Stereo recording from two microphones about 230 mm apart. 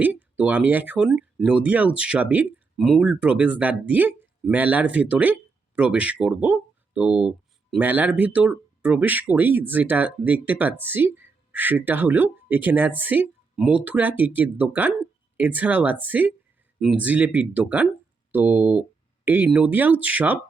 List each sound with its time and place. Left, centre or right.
0.0 s speech: centre